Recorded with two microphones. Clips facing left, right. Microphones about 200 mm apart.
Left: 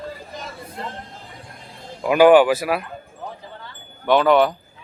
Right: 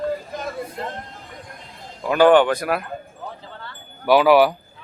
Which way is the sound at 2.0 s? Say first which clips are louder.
Left 2 dB; 10° left (ahead or behind).